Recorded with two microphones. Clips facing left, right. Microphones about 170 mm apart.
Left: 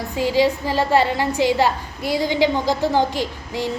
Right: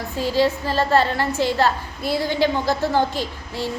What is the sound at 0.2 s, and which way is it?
A woman's voice, 15° left (ahead or behind).